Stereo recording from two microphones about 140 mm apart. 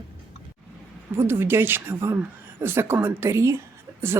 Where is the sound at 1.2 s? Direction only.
15° right (ahead or behind).